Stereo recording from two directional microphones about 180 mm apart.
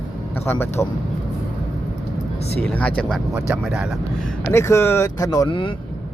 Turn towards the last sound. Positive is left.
turn(degrees=25)  # may be behind; listen again after turning